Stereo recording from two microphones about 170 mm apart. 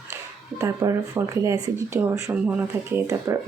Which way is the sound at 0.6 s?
15° right (ahead or behind).